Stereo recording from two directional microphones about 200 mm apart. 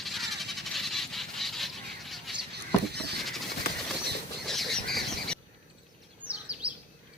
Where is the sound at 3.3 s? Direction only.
Centre (ahead or behind).